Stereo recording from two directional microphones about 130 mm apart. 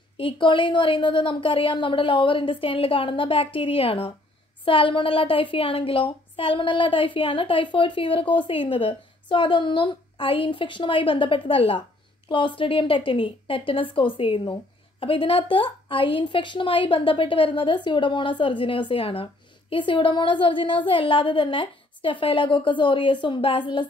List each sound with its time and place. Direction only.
0.2 s a woman's voice: 40° left (ahead or behind)